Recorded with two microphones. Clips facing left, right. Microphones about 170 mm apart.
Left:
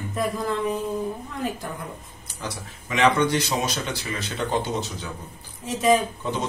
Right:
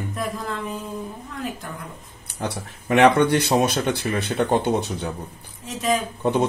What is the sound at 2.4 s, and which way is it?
Speech, 60° right (ahead or behind).